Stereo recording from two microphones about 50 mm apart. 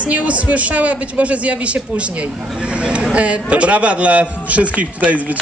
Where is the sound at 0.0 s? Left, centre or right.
Right.